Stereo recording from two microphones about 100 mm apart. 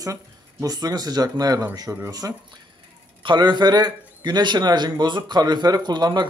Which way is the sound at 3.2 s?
50° right (ahead or behind).